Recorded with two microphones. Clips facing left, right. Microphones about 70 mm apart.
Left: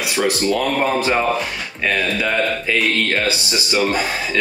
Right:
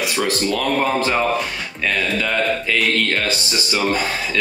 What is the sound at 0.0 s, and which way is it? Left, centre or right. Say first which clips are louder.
Speech: left 1 dB; centre.